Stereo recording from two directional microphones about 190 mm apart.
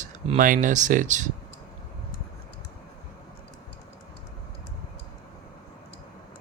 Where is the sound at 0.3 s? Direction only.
45° right (ahead or behind).